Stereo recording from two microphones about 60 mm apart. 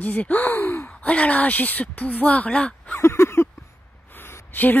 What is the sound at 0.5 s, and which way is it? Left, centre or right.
Gasp, left.